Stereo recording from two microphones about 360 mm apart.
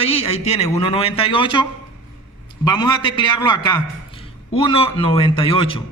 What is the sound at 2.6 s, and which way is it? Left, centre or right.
A man's voice, centre.